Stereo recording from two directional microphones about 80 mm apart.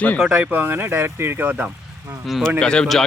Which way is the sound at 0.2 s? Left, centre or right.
Centre.